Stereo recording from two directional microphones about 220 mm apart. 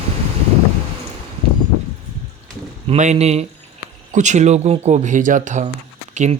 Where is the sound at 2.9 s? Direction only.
30° right (ahead or behind).